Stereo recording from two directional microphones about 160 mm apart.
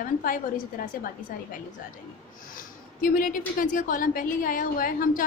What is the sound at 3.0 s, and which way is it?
A woman's voice, 60° left (ahead or behind).